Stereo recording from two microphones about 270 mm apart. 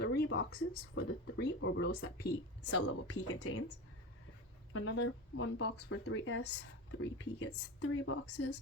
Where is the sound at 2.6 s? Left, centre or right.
Left.